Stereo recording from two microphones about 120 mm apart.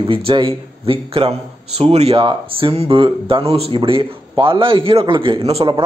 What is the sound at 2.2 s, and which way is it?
Speech, 45° right (ahead or behind).